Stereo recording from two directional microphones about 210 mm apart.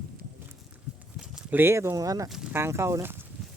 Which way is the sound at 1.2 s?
5° right (ahead or behind).